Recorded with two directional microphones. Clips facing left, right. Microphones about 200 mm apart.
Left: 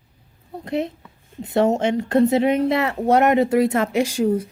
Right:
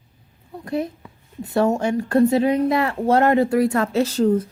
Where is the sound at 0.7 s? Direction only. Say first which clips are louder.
Even; 25° left (ahead or behind).